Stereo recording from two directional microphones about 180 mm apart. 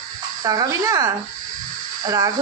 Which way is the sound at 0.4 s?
20° right (ahead or behind).